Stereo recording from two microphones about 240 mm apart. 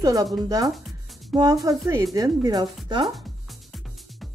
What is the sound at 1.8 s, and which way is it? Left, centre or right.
A woman's voice, centre.